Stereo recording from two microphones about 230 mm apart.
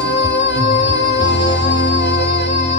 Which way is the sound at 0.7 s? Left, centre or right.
Left.